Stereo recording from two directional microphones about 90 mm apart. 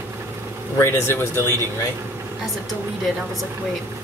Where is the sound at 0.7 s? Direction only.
30° left (ahead or behind).